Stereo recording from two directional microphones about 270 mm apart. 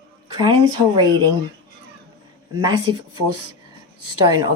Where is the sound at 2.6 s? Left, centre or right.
Centre.